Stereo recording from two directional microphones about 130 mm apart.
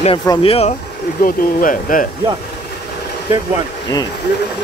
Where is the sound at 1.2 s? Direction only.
90° left.